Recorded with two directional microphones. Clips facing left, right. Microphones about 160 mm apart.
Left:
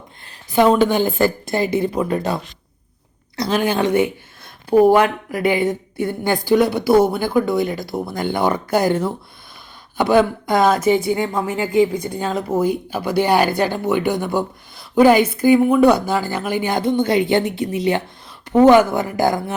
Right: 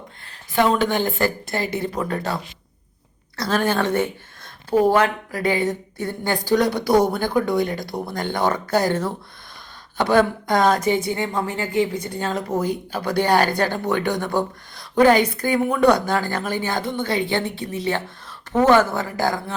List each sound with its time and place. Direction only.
0.5 s speech: 15° left (ahead or behind)